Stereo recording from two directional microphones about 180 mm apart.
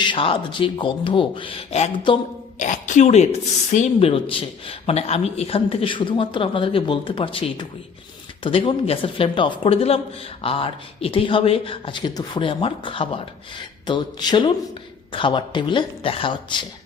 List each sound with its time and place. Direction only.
0.0 s speech: 30° left (ahead or behind)
2.6 s speech: 45° left (ahead or behind); by 16.6 s 25° left (ahead or behind)